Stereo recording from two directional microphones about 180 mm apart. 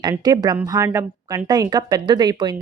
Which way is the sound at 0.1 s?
20° right (ahead or behind).